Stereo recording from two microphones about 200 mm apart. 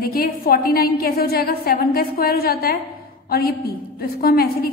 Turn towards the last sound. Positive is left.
turn(degrees=50)  # may be behind; listen again after turning